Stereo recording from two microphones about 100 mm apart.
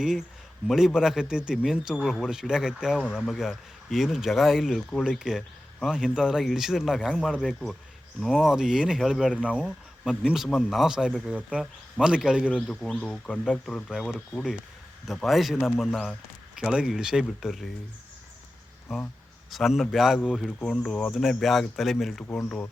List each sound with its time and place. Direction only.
0.0 s a man's voice: 5° right (ahead or behind)
18.9 s a man's voice: 5° right (ahead or behind)
20.6 s a man's voice: 10° left (ahead or behind)
22.4 s speech: 20° left (ahead or behind)